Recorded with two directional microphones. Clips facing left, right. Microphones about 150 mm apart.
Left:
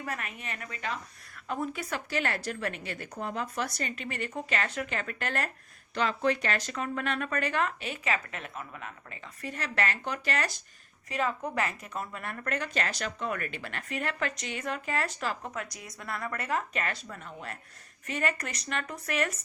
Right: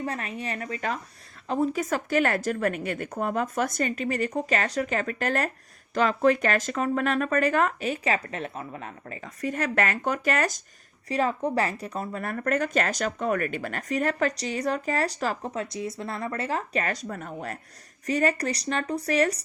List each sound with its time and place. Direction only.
0.0 s a woman's voice: 30° right (ahead or behind); by 10.6 s 50° right (ahead or behind)
11.1 s a woman's voice: 35° right (ahead or behind)